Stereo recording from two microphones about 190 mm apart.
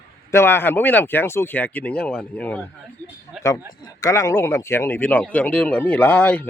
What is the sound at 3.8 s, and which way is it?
A man's voice, 15° left (ahead or behind).